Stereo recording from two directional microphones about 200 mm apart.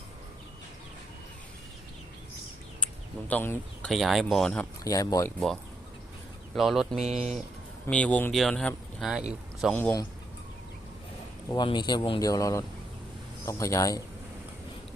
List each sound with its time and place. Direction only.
2.8 s a sound: 10° left (ahead or behind)
3.9 s speech: centre (ahead or behind)
4.8 s speech: 15° left (ahead or behind)
6.5 s speech: centre (ahead or behind)
7.2 s speech: 35° right (ahead or behind)
7.9 s speech: 5° left (ahead or behind)
11.4 s speech: 20° left (ahead or behind)